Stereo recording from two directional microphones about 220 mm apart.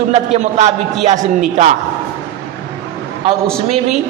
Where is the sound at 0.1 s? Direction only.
30° right (ahead or behind).